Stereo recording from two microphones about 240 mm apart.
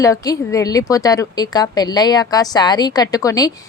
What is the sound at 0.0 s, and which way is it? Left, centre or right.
Speech, centre.